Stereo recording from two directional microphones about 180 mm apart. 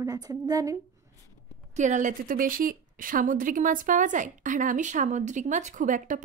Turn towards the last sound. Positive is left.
turn(degrees=-45)  # may be behind; listen again after turning